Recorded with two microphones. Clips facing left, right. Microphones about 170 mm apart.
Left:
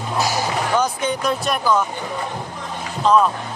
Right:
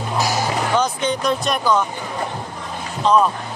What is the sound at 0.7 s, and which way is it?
Speech, 10° left (ahead or behind).